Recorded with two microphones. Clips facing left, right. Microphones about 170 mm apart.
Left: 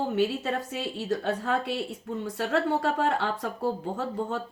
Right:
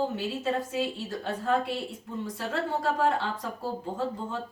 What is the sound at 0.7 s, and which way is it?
A woman's voice, 65° left (ahead or behind).